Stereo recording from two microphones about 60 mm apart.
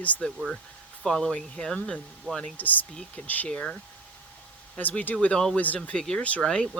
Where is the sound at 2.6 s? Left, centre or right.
Left.